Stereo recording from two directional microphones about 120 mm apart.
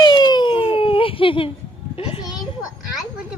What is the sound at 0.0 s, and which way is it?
Baby cry, 35° left (ahead or behind).